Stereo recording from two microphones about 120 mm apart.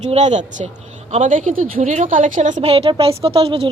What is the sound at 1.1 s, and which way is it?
Speech, 90° right.